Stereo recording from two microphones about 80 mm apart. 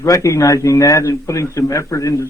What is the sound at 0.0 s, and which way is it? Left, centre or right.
A man's voice, left.